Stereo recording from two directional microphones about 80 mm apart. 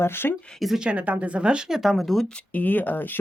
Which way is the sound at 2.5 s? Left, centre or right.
Left.